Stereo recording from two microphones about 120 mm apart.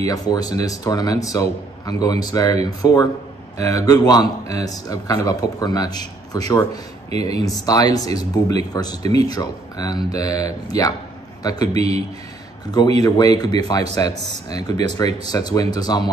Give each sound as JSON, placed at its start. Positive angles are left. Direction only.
{"t": 0.0, "sound": "a man's voice", "side_deg": 30}
{"t": 7.1, "sound": "speech", "side_deg": -60}
{"t": 7.4, "sound": "a man's voice", "side_deg": 30}
{"t": 9.0, "sound": "speech", "side_deg": -60}
{"t": 9.3, "sound": "a man's voice", "side_deg": 35}
{"t": 11.7, "sound": "speech", "side_deg": -60}
{"t": 13.0, "sound": "a man's voice", "side_deg": 30}